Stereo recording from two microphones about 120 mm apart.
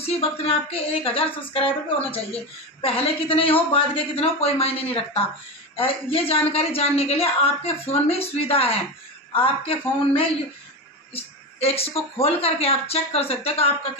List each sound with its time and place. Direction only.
0.0 s speech: 55° left (ahead or behind)